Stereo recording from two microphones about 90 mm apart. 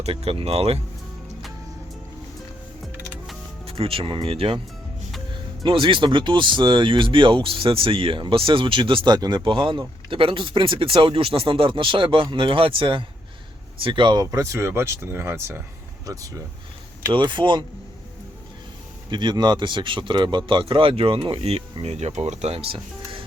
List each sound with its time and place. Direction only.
0.1 s speech: 90° right
3.7 s speech: 90° right
5.6 s speech: 70° right (ahead or behind); by 15.6 s 30° right (ahead or behind)
16.0 s speech: 40° right (ahead or behind)
17.1 s speech: 60° right (ahead or behind)
19.1 s speech: 55° right (ahead or behind); by 21.4 s 85° right
21.7 s speech: 65° right (ahead or behind)
22.5 s speech: 85° right